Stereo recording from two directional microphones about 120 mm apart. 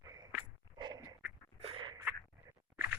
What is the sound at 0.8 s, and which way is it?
Dog, 35° right (ahead or behind).